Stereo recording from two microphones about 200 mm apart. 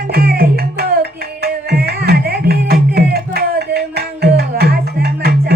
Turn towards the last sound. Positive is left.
turn(degrees=-50)  # may be behind; listen again after turning